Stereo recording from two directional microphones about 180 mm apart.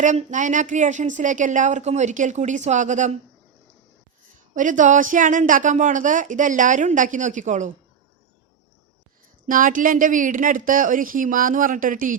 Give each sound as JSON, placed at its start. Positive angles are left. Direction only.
{"t": 0.0, "sound": "a woman's voice", "side_deg": -45}
{"t": 4.5, "sound": "a woman's voice", "side_deg": -45}
{"t": 9.5, "sound": "a woman's voice", "side_deg": -50}